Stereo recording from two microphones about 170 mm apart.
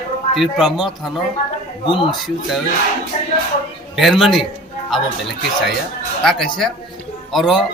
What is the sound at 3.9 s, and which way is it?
Speech, centre (ahead or behind).